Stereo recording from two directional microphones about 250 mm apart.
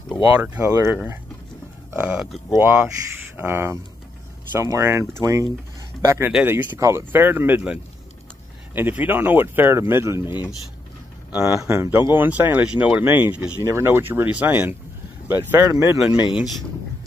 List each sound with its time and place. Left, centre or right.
0.3 s speech: centre
11.3 s speech: centre